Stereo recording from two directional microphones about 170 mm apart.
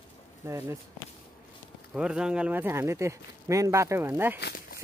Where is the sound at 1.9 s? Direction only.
5° right (ahead or behind).